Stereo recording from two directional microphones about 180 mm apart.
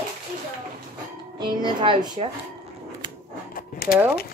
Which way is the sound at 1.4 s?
25° right (ahead or behind).